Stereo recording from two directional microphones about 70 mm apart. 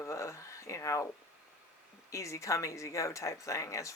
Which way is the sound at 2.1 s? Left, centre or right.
Left.